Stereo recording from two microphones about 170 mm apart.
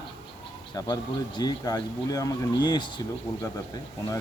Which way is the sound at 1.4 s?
25° left (ahead or behind).